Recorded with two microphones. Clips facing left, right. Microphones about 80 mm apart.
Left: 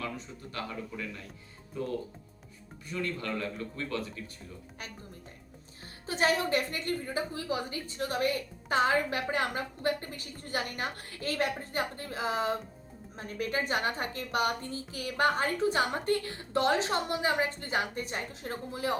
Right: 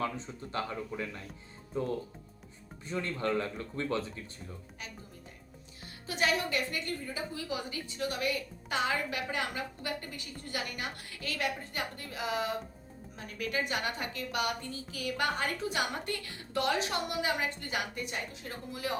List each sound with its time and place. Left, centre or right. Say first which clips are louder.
0.0 s speech: right 3 dB; right
6.1 s a woman's voice: left 3 dB; left